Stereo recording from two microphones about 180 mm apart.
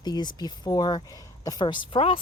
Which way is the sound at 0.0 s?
25° left (ahead or behind).